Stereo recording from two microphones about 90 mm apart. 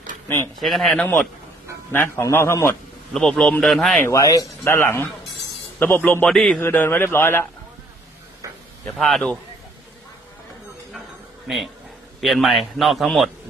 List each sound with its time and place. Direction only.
0.6 s speech: centre (ahead or behind)
1.9 s a man's voice: 25° left (ahead or behind)
3.1 s speech: 5° left (ahead or behind)
4.1 s a man's voice: 40° left (ahead or behind)
4.6 s speech: 25° left (ahead or behind)
6.2 s speech: centre (ahead or behind)
6.6 s speech: 25° left (ahead or behind)
9.0 s speech: 5° left (ahead or behind)
11.4 s speech: centre (ahead or behind)